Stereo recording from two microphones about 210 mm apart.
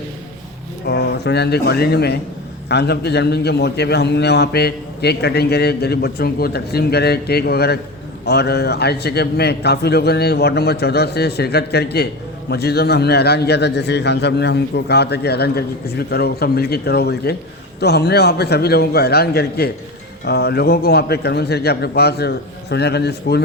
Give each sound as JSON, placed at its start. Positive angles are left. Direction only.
{"t": 0.9, "sound": "a man's voice", "side_deg": 50}